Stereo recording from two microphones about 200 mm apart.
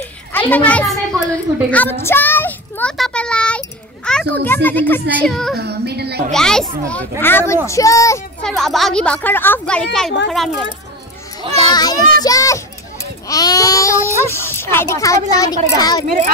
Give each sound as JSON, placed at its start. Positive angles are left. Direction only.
{"t": 0.3, "sound": "a sound", "side_deg": 10}
{"t": 4.6, "sound": "a child's voice", "side_deg": 10}
{"t": 5.6, "sound": "child singing", "side_deg": -55}
{"t": 6.3, "sound": "a child's voice", "side_deg": 5}
{"t": 8.4, "sound": "speech", "side_deg": 5}
{"t": 11.5, "sound": "a child's voice", "side_deg": 20}